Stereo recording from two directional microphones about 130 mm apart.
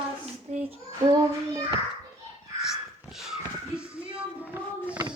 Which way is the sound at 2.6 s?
Centre (ahead or behind).